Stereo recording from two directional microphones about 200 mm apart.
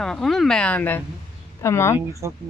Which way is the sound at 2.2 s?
15° right (ahead or behind).